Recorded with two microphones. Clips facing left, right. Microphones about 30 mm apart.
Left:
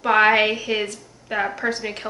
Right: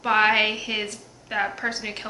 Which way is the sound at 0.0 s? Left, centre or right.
Centre.